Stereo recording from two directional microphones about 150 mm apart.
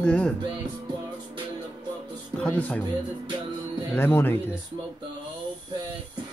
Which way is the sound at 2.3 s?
10° left (ahead or behind).